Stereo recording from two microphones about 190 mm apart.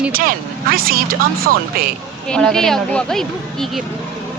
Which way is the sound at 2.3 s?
5° left (ahead or behind).